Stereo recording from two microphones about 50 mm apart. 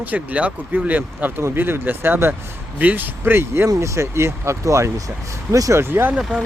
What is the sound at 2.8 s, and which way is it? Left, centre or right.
Speech, right.